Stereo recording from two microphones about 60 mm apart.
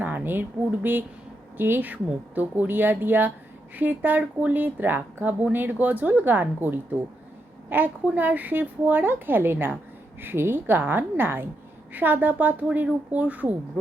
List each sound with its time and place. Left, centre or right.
0.0 s a woman's voice: right